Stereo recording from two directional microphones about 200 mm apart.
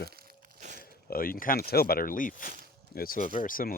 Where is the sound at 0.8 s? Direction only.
45° left (ahead or behind).